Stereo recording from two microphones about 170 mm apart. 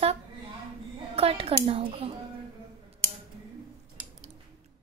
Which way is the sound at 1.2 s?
35° right (ahead or behind).